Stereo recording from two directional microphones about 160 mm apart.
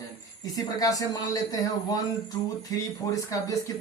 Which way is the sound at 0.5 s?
20° left (ahead or behind).